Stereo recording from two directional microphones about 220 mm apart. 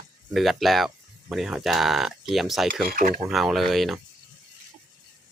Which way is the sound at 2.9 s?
40° right (ahead or behind).